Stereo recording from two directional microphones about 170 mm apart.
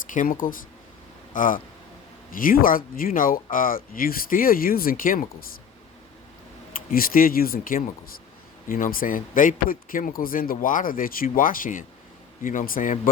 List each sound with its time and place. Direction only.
0.1 s speech: 50° left (ahead or behind)
6.9 s speech: 55° left (ahead or behind)